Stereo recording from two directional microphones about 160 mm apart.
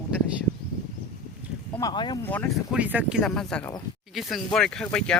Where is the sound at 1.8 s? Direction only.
25° left (ahead or behind).